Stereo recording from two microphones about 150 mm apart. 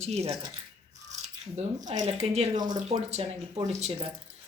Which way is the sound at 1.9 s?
50° right (ahead or behind).